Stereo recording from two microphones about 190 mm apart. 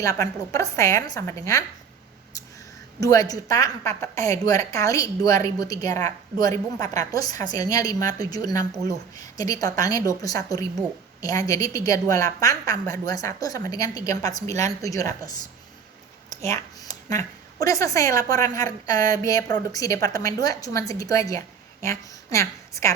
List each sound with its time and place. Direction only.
0.0 s a woman's voice: 15° left (ahead or behind)
3.0 s a woman's voice: 20° left (ahead or behind)
16.3 s a sound: 15° left (ahead or behind)
17.1 s a woman's voice: 15° left (ahead or behind)